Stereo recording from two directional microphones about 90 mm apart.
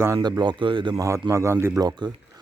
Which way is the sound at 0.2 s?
55° right (ahead or behind).